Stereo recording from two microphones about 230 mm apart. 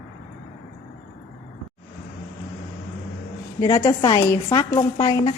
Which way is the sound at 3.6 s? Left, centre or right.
Centre.